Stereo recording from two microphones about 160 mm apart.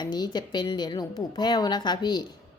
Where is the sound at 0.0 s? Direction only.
25° left (ahead or behind).